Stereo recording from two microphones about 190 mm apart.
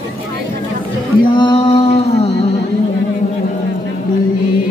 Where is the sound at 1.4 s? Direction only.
25° left (ahead or behind).